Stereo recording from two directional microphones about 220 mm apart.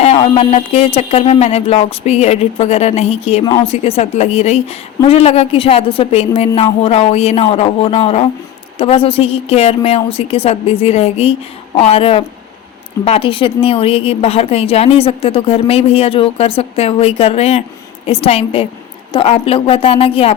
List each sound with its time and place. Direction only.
0.0 s a woman's voice: 25° left (ahead or behind)